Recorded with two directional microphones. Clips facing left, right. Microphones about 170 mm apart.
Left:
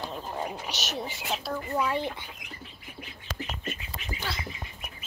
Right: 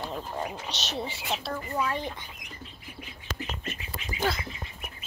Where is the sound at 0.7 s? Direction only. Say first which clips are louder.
Right 1 dB; 30° right (ahead or behind).